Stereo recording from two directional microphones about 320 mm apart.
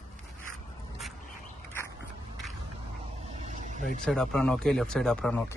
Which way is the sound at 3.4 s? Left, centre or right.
Right.